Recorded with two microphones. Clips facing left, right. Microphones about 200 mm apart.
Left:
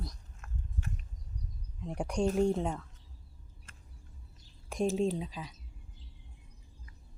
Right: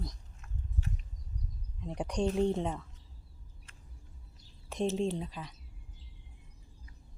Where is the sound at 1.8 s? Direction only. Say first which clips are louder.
Left 1 dB; 5° left (ahead or behind).